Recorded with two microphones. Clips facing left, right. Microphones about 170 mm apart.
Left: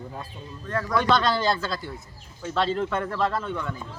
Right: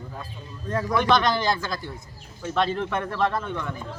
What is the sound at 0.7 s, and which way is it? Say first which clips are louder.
Speech: right 1 dB; 20° right (ahead or behind).